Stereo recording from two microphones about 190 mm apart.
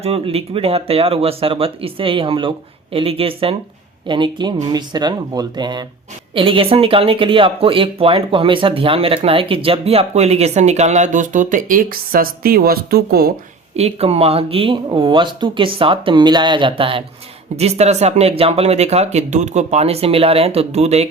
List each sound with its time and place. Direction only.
0.0 s speech: 30° right (ahead or behind); by 13.3 s 55° right (ahead or behind)
13.7 s speech: 35° right (ahead or behind)